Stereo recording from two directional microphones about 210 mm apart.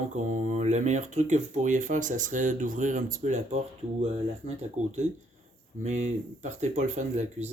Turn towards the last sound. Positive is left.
turn(degrees=-35)  # may be behind; listen again after turning